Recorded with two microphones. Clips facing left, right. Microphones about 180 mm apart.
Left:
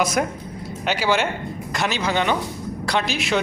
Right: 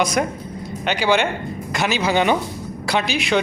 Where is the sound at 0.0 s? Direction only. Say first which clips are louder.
Right 1 dB; 5° left (ahead or behind).